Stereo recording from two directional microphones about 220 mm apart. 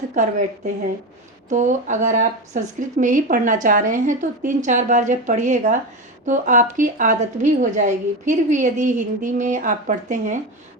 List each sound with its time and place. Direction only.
0.1 s speech: 35° right (ahead or behind)